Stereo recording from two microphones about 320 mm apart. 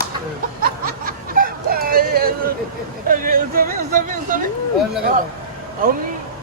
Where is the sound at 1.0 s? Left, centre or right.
Right.